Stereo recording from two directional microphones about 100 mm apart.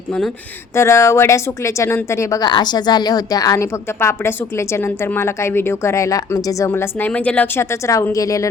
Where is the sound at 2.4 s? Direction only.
45° left (ahead or behind).